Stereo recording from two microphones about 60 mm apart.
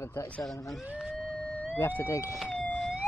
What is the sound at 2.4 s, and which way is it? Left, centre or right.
Police car, left.